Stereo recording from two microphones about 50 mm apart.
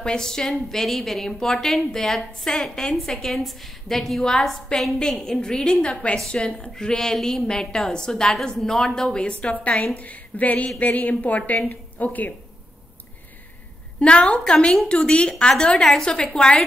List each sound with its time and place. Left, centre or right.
0.0 s a woman's voice: centre
9.5 s a woman's voice: left
13.9 s a woman's voice: left